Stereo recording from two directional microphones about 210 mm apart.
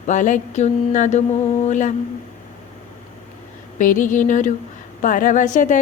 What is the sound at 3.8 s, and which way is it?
Speech, 40° left (ahead or behind).